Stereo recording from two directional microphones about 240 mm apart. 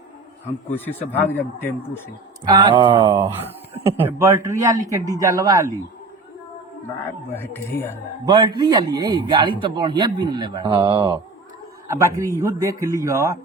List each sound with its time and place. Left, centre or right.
0.7 s speech: centre
2.4 s a man's voice: centre
7.0 s speech: centre
8.2 s a man's voice: centre